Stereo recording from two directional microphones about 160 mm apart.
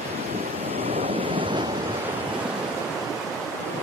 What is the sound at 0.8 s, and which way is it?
Waves, 35° right (ahead or behind).